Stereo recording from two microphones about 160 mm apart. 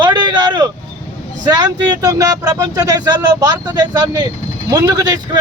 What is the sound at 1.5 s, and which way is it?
Speech, 25° right (ahead or behind).